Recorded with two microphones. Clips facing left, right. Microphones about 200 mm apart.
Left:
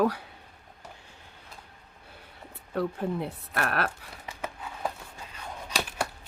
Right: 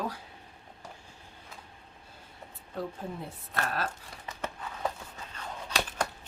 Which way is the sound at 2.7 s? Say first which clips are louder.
Left 7 dB; 70° left (ahead or behind).